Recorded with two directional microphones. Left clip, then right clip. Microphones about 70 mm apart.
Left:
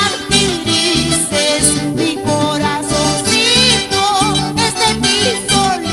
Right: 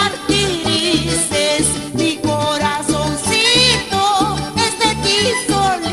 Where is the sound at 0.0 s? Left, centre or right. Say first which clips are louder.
Left 2 dB; right.